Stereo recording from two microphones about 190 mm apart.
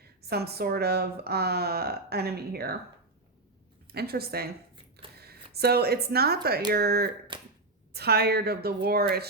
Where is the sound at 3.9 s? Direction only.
55° right (ahead or behind).